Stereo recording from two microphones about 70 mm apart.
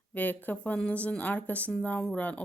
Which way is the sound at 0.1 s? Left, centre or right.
Left.